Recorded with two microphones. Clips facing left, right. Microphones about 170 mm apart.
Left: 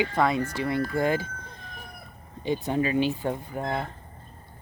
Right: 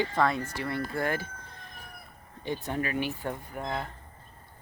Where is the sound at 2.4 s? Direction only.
15° left (ahead or behind).